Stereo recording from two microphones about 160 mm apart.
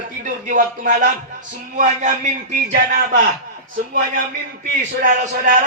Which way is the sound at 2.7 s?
65° right (ahead or behind).